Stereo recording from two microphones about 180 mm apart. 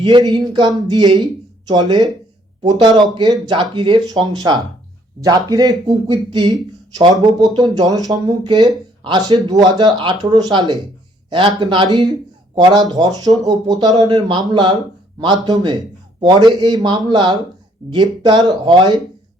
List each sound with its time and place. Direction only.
0.0 s speech: 25° right (ahead or behind)